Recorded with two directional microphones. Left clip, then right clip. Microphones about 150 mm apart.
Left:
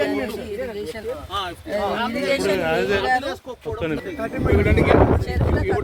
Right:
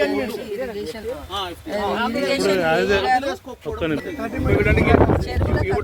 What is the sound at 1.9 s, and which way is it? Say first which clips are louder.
Speech: right 1 dB; 60° right (ahead or behind).